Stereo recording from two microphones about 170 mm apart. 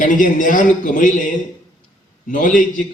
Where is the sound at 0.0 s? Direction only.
50° left (ahead or behind).